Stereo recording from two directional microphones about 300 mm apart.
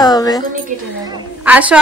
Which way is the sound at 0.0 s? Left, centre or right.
Centre.